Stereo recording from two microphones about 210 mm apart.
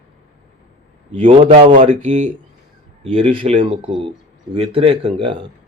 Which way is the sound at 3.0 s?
25° right (ahead or behind).